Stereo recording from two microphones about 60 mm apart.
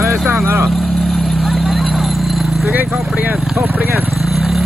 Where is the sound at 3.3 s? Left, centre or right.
Centre.